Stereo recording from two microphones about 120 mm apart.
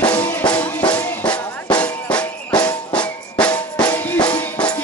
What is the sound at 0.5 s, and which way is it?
Music, 10° left (ahead or behind).